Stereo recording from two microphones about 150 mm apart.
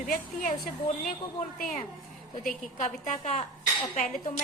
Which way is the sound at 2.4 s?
55° left (ahead or behind).